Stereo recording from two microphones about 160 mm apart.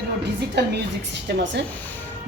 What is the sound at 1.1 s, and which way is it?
Speech, 90° right.